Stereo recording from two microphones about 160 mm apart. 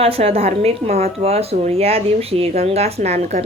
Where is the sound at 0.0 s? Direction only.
40° right (ahead or behind).